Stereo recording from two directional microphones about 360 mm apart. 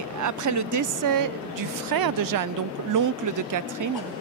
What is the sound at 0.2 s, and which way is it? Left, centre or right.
Speech, right.